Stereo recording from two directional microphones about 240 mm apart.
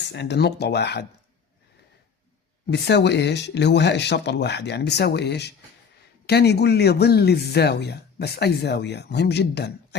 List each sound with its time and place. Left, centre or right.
0.1 s speech: left
2.6 s speech: left